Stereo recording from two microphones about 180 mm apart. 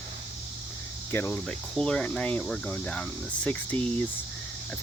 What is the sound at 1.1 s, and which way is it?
Speech, 10° left (ahead or behind).